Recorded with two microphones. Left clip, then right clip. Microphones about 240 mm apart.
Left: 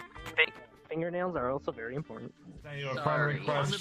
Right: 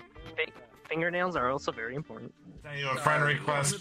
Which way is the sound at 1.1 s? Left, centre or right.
Right.